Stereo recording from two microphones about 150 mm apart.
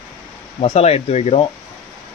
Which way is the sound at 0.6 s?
45° left (ahead or behind).